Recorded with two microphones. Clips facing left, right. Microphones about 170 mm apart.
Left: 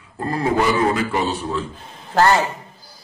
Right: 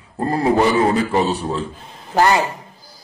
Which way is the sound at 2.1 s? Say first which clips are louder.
Even; 15° right (ahead or behind).